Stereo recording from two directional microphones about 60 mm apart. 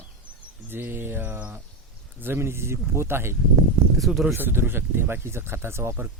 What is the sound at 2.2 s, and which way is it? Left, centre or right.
Speech, right.